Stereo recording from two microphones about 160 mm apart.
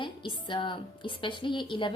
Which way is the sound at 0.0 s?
30° left (ahead or behind).